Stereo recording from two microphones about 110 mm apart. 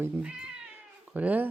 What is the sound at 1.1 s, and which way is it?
Speech, 15° right (ahead or behind).